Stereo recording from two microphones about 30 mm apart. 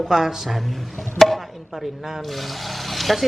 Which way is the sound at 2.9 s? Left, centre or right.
Centre.